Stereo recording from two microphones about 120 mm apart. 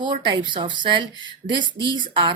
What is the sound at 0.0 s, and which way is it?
Speech, 40° right (ahead or behind).